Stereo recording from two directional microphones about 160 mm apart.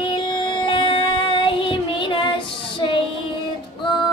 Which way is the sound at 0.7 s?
30° left (ahead or behind).